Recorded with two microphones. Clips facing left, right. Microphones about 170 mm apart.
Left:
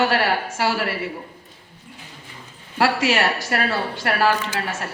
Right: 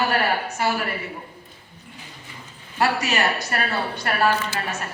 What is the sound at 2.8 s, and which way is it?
Speech, 90° left.